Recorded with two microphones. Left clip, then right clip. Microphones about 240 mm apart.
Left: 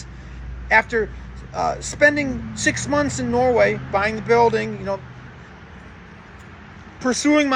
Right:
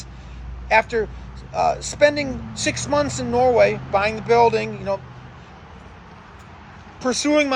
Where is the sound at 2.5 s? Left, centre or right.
Centre.